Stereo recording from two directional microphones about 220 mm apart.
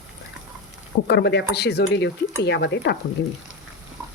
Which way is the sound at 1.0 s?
50° left (ahead or behind).